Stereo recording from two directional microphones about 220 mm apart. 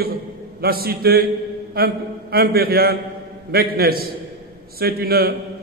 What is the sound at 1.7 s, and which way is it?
A man's voice, 45° right (ahead or behind).